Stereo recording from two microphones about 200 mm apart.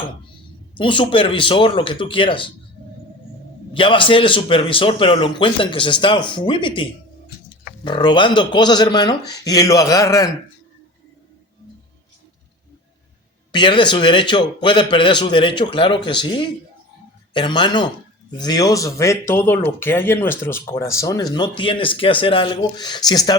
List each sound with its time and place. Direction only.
0.7 s a man's voice: 25° left (ahead or behind)
3.8 s a man's voice: 25° left (ahead or behind)
13.5 s a man's voice: 25° left (ahead or behind)